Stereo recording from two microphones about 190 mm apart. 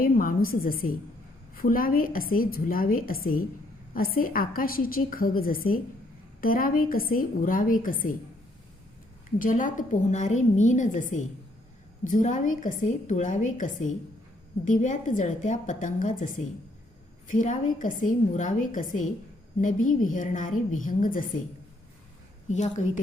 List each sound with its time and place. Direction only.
0.0 s a woman's voice: 45° left (ahead or behind)
9.4 s a woman's voice: 45° left (ahead or behind)
12.0 s a woman's voice: 40° left (ahead or behind)
22.4 s a woman's voice: 40° left (ahead or behind)